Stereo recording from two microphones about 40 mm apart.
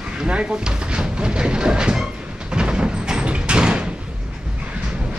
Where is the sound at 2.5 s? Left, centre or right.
Right.